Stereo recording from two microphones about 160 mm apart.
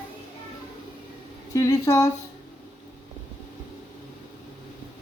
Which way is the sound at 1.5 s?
20° left (ahead or behind).